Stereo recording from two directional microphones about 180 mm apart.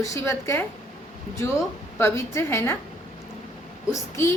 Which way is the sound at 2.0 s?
15° left (ahead or behind).